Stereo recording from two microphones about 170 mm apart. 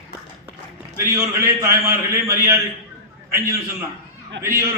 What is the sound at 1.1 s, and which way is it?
A man's voice, 15° right (ahead or behind).